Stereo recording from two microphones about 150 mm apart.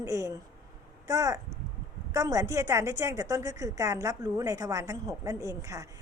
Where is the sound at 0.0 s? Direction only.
20° right (ahead or behind).